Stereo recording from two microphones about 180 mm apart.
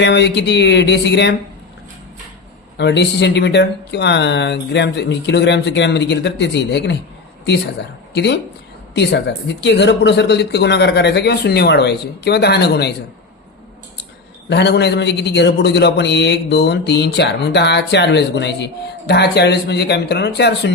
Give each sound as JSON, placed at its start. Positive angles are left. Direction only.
{"t": 0.0, "sound": "a man's voice", "side_deg": 75}
{"t": 2.7, "sound": "a man's voice", "side_deg": 70}
{"t": 8.1, "sound": "a man's voice", "side_deg": 70}
{"t": 14.5, "sound": "a man's voice", "side_deg": 70}